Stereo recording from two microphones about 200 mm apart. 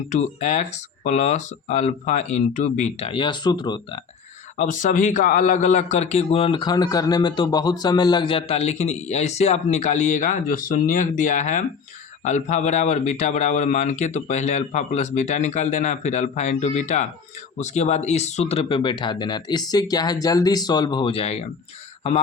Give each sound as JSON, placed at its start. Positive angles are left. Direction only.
{"t": 0.1, "sound": "a man's voice", "side_deg": 35}
{"t": 4.5, "sound": "a man's voice", "side_deg": 40}